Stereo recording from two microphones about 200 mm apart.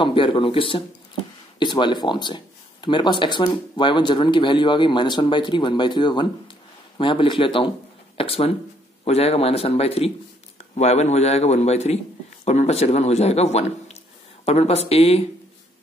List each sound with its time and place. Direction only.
0.0 s a man's voice: 25° left (ahead or behind)